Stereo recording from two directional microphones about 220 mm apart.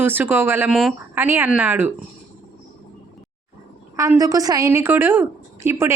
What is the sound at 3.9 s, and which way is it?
A woman's voice, 15° right (ahead or behind).